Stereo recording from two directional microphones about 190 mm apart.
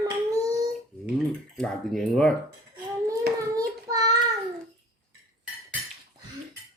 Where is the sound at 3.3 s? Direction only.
20° right (ahead or behind).